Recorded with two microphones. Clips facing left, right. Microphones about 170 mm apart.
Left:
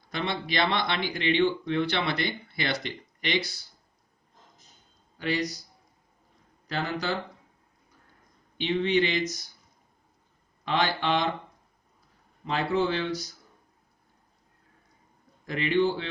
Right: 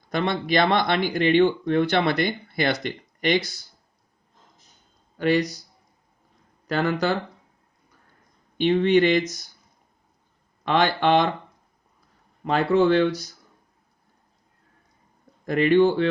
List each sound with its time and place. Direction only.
0.1 s speech: 50° right (ahead or behind)
5.1 s speech: 55° right (ahead or behind)
6.7 s speech: 55° right (ahead or behind)
8.5 s speech: 50° right (ahead or behind)
10.7 s speech: 60° right (ahead or behind)
12.5 s speech: 55° right (ahead or behind)
15.4 s speech: 50° right (ahead or behind)